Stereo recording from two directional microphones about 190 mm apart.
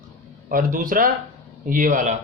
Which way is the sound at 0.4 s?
45° right (ahead or behind).